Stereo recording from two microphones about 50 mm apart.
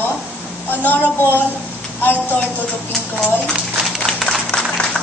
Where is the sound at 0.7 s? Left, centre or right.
Left.